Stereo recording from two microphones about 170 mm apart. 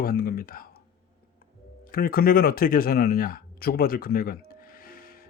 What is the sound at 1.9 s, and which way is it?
Speech, 60° left (ahead or behind).